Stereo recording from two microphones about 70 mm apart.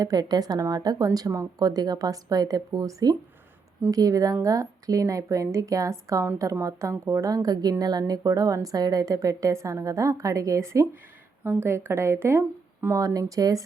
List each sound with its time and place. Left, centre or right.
0.0 s a woman's voice: right
11.4 s speech: right
12.9 s a woman's voice: right